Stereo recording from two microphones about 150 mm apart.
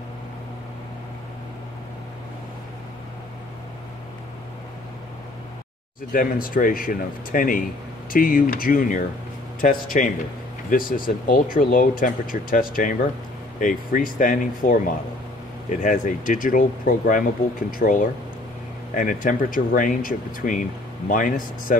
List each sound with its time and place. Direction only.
6.1 s speech: 70° left (ahead or behind)